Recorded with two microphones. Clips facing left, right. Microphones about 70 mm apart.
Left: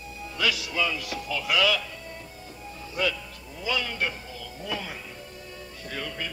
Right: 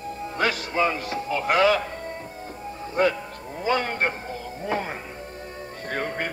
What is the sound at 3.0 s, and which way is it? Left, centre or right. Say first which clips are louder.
Music: right 7 dB; right.